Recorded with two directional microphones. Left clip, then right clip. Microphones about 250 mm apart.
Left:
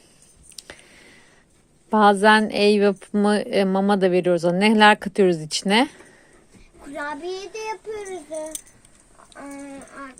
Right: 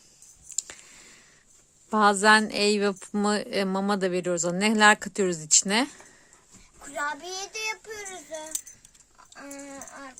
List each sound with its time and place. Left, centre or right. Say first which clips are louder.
0.5 s a sound: right 4 dB; centre
1.9 s a woman's voice: left 4 dB; centre
7.0 s a child's voice: left 2 dB; right